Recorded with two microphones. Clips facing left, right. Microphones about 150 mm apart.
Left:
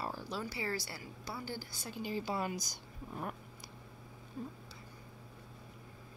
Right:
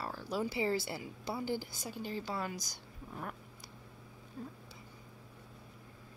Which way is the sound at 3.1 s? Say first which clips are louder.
Left 2 dB; 20° left (ahead or behind).